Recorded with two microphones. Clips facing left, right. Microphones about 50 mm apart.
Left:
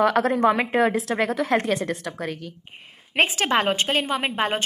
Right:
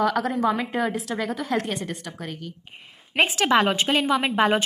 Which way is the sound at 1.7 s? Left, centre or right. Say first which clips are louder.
Left 5 dB; left.